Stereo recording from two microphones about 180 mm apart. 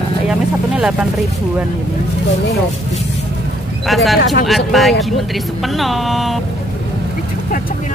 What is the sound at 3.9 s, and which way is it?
Speech, centre (ahead or behind).